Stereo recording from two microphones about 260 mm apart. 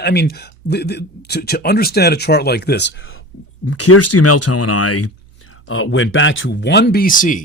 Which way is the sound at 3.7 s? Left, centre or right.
Left.